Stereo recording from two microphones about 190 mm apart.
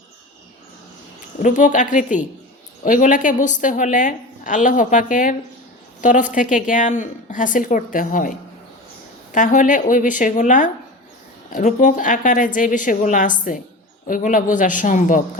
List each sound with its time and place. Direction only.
1.4 s a woman's voice: 45° left (ahead or behind)